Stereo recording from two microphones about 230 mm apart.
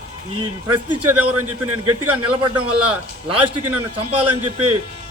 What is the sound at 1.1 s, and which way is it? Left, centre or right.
A man's voice, right.